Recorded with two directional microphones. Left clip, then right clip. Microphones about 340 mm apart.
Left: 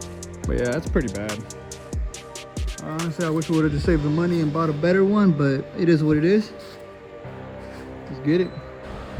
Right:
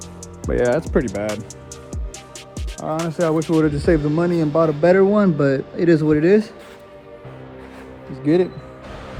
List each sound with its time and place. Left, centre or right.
0.4 s speech: centre
2.9 s speech: centre